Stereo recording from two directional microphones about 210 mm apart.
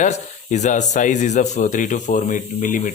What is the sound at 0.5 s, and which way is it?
Speech, 35° left (ahead or behind).